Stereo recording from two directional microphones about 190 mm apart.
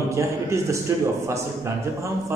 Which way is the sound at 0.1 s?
15° right (ahead or behind).